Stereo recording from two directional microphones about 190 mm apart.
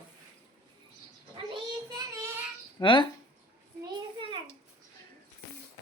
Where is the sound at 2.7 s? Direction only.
25° left (ahead or behind).